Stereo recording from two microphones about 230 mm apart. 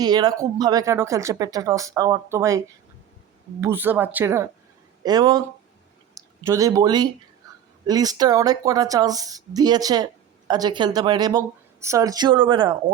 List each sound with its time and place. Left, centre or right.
0.0 s speech: centre
3.6 s speech: centre
6.4 s speech: centre